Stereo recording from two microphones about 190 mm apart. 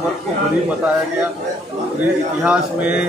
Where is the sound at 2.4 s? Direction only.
5° right (ahead or behind).